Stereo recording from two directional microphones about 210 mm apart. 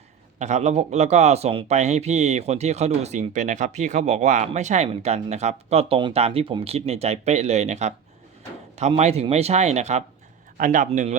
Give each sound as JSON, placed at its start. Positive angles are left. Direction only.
{"t": 0.3, "sound": "speech", "side_deg": -35}